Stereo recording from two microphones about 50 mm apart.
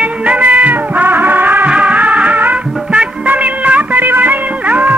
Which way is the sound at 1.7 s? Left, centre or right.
Right.